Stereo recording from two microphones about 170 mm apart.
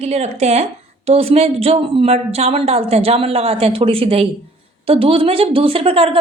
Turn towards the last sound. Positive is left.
turn(degrees=-35)  # may be behind; listen again after turning